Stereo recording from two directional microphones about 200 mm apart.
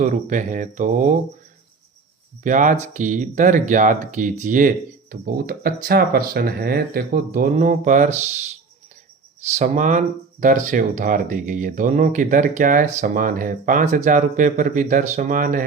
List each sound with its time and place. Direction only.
0.0 s speech: 40° right (ahead or behind)
2.4 s speech: 40° right (ahead or behind)
9.6 s speech: 40° right (ahead or behind)